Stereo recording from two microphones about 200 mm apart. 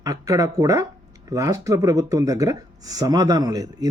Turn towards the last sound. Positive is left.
turn(degrees=-20)  # may be behind; listen again after turning